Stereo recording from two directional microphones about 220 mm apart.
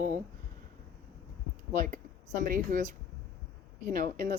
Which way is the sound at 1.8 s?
35° right (ahead or behind).